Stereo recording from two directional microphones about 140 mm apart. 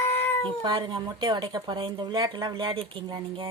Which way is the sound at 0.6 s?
30° right (ahead or behind).